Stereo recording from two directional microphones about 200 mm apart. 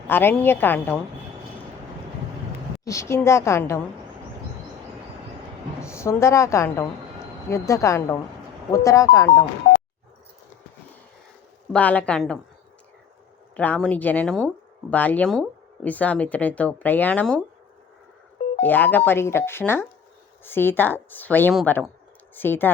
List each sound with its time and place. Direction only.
0.1 s speech: 10° left (ahead or behind)
2.8 s speech: 15° left (ahead or behind)
5.8 s speech: 15° left (ahead or behind)
11.7 s a woman's voice: 5° left (ahead or behind)
13.6 s speech: 5° left (ahead or behind)
18.6 s speech: 10° left (ahead or behind)